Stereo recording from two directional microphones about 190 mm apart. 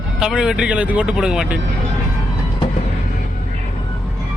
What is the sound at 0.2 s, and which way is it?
Speech, 5° right (ahead or behind).